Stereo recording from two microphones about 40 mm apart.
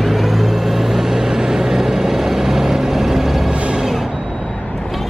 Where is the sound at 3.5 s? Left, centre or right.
Right.